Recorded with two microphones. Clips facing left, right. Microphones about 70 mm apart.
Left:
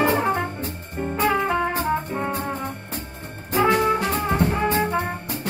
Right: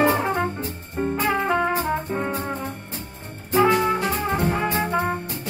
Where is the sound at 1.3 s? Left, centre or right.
Centre.